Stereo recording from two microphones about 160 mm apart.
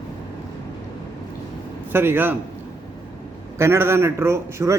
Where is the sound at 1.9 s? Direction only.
15° right (ahead or behind).